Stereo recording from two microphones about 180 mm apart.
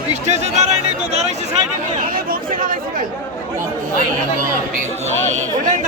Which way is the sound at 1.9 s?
50° right (ahead or behind).